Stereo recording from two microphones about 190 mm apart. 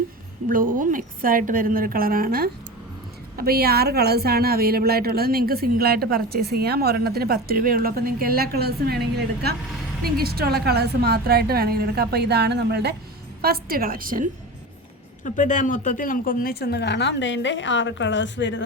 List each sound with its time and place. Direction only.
0.4 s a woman's voice: 45° right (ahead or behind)
15.2 s a woman's voice: 40° left (ahead or behind); by 18.6 s 70° left (ahead or behind)